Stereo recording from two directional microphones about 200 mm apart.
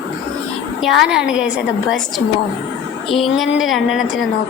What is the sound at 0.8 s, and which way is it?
A woman's voice, centre (ahead or behind).